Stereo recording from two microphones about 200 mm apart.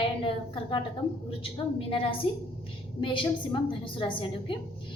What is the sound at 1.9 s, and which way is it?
A woman's voice, 25° left (ahead or behind).